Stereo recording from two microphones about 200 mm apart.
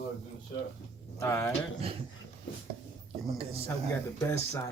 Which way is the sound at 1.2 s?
15° left (ahead or behind).